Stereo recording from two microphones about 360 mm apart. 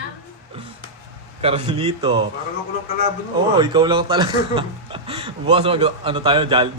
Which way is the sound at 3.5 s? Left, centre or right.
Centre.